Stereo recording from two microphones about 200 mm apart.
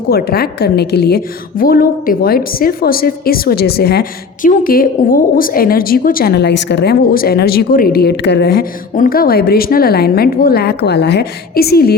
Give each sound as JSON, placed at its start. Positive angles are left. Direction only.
{"t": 0.1, "sound": "a woman's voice", "side_deg": 50}